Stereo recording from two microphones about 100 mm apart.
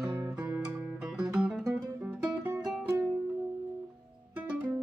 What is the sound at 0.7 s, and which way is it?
Music, 15° right (ahead or behind).